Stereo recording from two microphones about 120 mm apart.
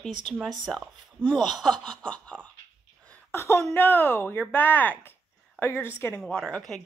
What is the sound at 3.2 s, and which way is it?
A woman's voice, 20° left (ahead or behind).